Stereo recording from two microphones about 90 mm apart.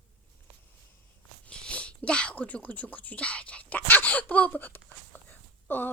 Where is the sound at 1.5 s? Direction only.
10° left (ahead or behind).